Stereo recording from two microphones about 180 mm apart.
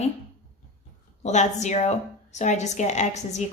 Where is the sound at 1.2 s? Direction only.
40° left (ahead or behind).